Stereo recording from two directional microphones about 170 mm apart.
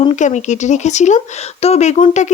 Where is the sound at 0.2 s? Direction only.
45° left (ahead or behind).